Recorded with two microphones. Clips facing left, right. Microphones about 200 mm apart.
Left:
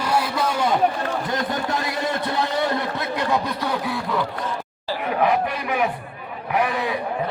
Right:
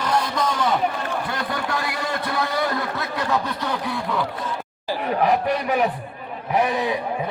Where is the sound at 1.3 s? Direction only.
20° left (ahead or behind).